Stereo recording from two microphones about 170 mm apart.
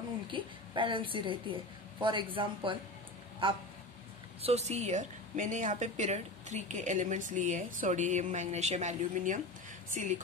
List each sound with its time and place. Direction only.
0.3 s a woman's voice: 30° right (ahead or behind)
4.4 s a woman's voice: 40° right (ahead or behind)